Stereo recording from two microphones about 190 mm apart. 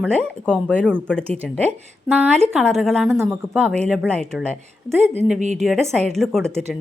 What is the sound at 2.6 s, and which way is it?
Speech, centre (ahead or behind).